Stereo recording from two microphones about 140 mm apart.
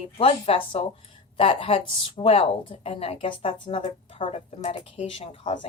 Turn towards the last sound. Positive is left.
turn(degrees=45)  # may be behind; listen again after turning